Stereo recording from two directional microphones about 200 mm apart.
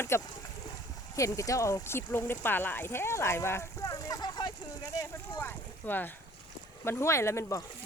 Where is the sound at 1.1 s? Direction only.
15° left (ahead or behind).